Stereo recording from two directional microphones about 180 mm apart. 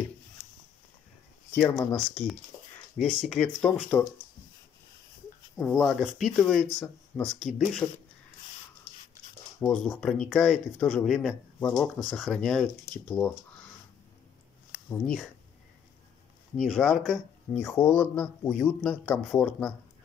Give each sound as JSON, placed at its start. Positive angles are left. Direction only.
{"t": 1.7, "sound": "speech", "side_deg": 15}
{"t": 2.0, "sound": "speech", "side_deg": 0}
{"t": 5.6, "sound": "speech", "side_deg": 0}
{"t": 9.6, "sound": "speech", "side_deg": 5}
{"t": 15.0, "sound": "speech", "side_deg": 0}
{"t": 16.5, "sound": "speech", "side_deg": 0}
{"t": 17.5, "sound": "speech", "side_deg": 10}